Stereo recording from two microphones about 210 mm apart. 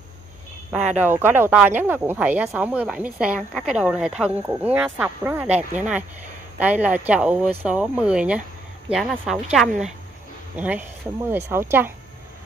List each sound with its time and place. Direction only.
0.7 s speech: 5° right (ahead or behind)